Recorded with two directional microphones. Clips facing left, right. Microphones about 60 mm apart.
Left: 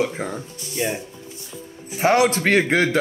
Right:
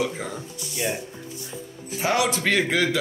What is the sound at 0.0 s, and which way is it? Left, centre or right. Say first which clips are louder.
Speech: left 3 dB; left.